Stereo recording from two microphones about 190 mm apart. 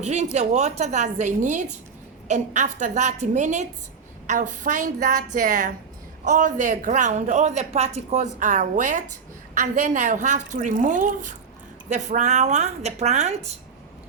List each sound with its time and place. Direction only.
0.0 s a woman's voice: 40° right (ahead or behind)